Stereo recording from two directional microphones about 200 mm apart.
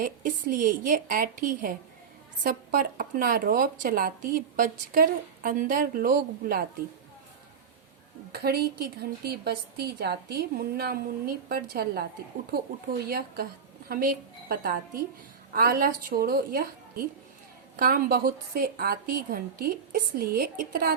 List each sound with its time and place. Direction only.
0.0 s speech: 45° right (ahead or behind)
8.3 s speech: 50° right (ahead or behind)
13.1 s speech: 50° right (ahead or behind)